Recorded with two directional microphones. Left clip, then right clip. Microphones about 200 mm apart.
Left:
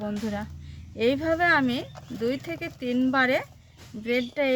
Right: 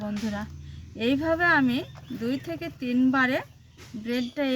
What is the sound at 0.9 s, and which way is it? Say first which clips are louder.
A woman's voice: left 1 dB; 25° left (ahead or behind).